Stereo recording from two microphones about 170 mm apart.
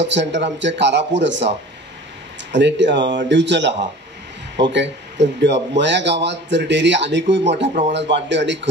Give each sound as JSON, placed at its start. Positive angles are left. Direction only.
{"t": 0.0, "sound": "a man's voice", "side_deg": -90}
{"t": 2.5, "sound": "a man's voice", "side_deg": -90}